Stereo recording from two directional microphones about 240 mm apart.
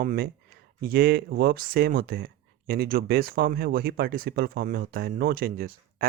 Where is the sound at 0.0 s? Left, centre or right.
Right.